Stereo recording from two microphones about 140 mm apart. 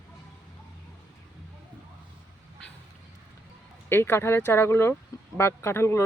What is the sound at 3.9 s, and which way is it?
Speech, 15° left (ahead or behind).